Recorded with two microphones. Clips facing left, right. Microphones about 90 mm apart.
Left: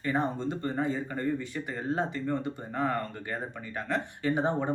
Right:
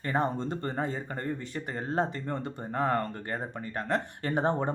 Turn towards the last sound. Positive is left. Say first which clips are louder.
# left 1 dB
turn(degrees=-45)  # may be behind; listen again after turning